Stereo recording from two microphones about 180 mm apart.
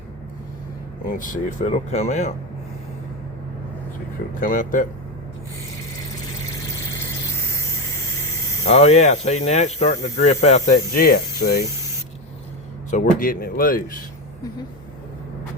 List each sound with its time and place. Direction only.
1.1 s speech: 45° left (ahead or behind)
4.4 s speech: 45° left (ahead or behind)
8.6 s speech: 35° left (ahead or behind)
11.0 s speech: 60° left (ahead or behind)
12.9 s speech: 50° left (ahead or behind)